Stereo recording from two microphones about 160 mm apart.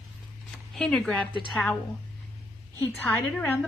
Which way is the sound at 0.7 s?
Centre (ahead or behind).